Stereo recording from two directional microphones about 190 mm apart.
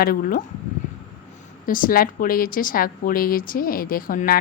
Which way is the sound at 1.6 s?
45° left (ahead or behind).